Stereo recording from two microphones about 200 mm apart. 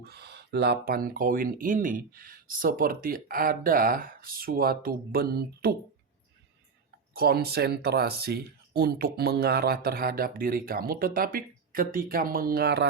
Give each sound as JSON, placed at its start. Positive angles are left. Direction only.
{"t": 0.0, "sound": "speech", "side_deg": -55}
{"t": 7.1, "sound": "speech", "side_deg": -50}